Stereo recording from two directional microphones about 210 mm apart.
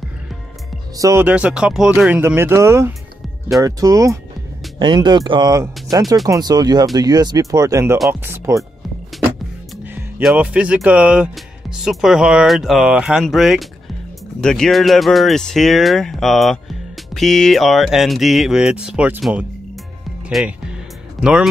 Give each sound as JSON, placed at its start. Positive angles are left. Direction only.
{"t": 0.9, "sound": "speech", "side_deg": -15}
{"t": 9.8, "sound": "speech", "side_deg": -10}